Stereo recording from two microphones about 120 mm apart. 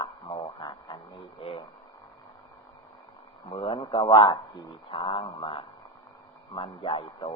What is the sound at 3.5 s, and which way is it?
A man's voice, 45° left (ahead or behind).